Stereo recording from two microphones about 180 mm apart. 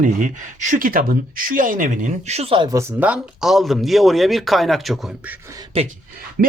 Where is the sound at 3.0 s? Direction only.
5° right (ahead or behind).